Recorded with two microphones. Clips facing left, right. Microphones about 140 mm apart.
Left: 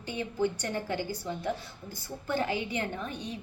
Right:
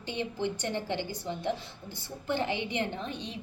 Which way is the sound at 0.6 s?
20° right (ahead or behind).